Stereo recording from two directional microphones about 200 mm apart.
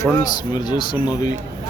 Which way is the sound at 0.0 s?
20° left (ahead or behind).